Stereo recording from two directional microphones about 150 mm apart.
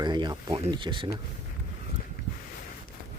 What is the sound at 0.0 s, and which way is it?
Speech, 30° right (ahead or behind).